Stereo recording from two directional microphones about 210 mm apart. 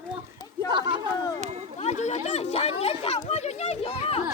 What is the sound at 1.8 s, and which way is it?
Chatter, 35° left (ahead or behind).